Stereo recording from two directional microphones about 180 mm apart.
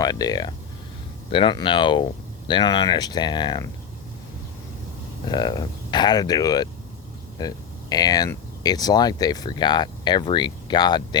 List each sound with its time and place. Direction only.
0.0 s speech: 20° left (ahead or behind)
5.2 s speech: 25° left (ahead or behind)